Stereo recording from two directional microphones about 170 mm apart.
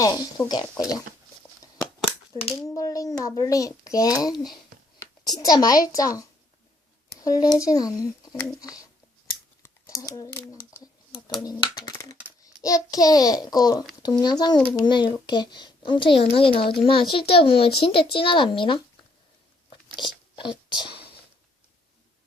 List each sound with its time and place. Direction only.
0.0 s a child's voice: 20° left (ahead or behind)
2.6 s a child's voice: 20° left (ahead or behind)
9.6 s a sound: 20° left (ahead or behind)
11.4 s a child's voice: 25° left (ahead or behind)
20.0 s whispering: 30° left (ahead or behind)